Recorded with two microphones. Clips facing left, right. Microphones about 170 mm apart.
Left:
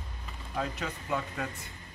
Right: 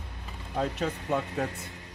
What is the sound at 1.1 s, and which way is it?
Speech, 30° right (ahead or behind).